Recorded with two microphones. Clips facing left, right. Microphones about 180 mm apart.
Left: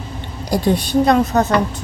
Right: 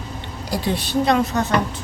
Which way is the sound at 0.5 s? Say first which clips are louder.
Left 6 dB; 45° left (ahead or behind).